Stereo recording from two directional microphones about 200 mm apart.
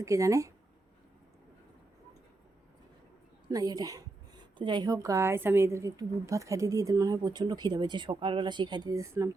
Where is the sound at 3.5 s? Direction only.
20° right (ahead or behind).